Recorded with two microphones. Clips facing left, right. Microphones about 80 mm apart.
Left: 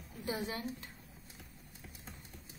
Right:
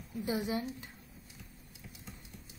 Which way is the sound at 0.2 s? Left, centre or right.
Centre.